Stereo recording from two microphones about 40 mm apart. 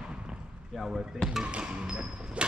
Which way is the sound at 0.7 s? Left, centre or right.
Centre.